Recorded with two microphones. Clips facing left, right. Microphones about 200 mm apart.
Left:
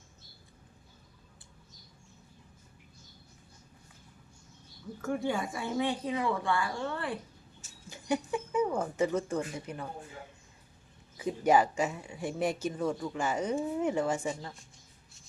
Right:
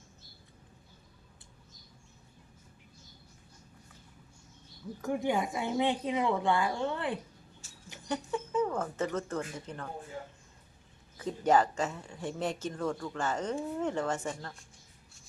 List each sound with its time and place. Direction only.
5.0 s a woman's voice: 20° right (ahead or behind)
7.9 s a sound: 10° left (ahead or behind)
9.1 s speech: 10° left (ahead or behind)
11.2 s speech: 10° left (ahead or behind)